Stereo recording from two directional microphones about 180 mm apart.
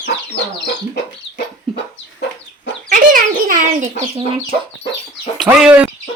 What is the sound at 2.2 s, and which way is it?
Chicken, 75° left (ahead or behind).